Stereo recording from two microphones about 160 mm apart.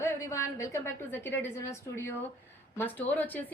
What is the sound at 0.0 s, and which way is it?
A woman's voice, 20° left (ahead or behind).